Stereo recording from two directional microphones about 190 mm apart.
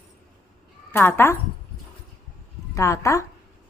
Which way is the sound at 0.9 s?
10° left (ahead or behind).